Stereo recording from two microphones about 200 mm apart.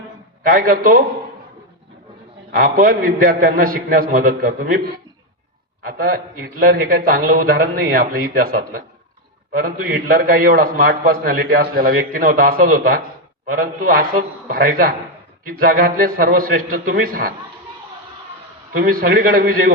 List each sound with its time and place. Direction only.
0.4 s a man's voice: 45° right (ahead or behind)
2.6 s a man's voice: 45° right (ahead or behind)
5.8 s a man's voice: 45° right (ahead or behind)
18.8 s a man's voice: 45° right (ahead or behind)